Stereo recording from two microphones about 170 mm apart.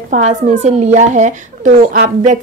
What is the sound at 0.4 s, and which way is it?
Speech, 40° right (ahead or behind).